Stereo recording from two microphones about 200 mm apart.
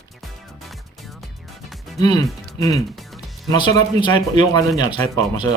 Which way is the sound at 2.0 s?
20° left (ahead or behind).